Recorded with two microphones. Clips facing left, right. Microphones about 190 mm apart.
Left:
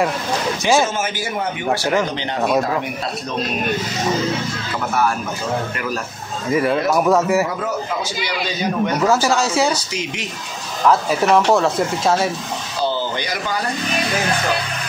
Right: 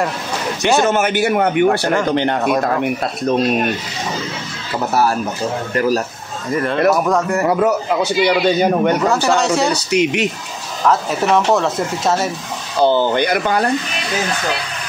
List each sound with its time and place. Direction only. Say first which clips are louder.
0.6 s speech: right 2 dB; centre (ahead or behind)
0.8 s a man's voice: right 8 dB; 65° right (ahead or behind)
5.8 s speech: right 9 dB; 35° right (ahead or behind)
6.5 s speech: right 2 dB; 5° left (ahead or behind)
7.4 s a man's voice: right 8 dB; 60° right (ahead or behind)
9.0 s speech: right 1 dB; centre (ahead or behind)
9.8 s a man's voice: right 11 dB; 65° right (ahead or behind)
10.9 s speech: even; centre (ahead or behind)
12.8 s a man's voice: right 9 dB; 55° right (ahead or behind)